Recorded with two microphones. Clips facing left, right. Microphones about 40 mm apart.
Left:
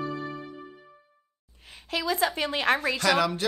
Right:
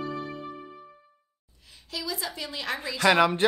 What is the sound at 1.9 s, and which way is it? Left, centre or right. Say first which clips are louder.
A woman's voice: left 7 dB; left.